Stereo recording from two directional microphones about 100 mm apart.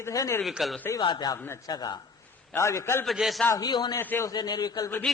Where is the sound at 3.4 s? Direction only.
40° left (ahead or behind).